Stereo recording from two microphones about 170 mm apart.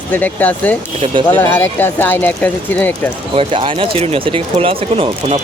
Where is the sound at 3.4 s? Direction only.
30° right (ahead or behind).